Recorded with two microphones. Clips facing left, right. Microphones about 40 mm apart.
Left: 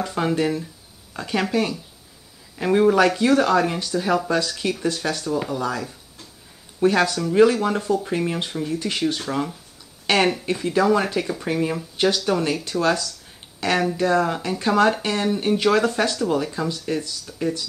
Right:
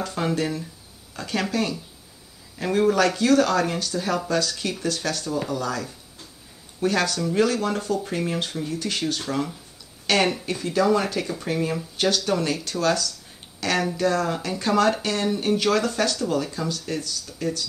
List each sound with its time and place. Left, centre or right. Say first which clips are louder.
0.0 s speech: left 3 dB; centre